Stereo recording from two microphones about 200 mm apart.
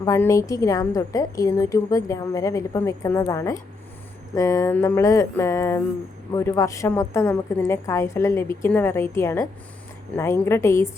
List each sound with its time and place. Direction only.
0.0 s a woman's voice: 15° left (ahead or behind)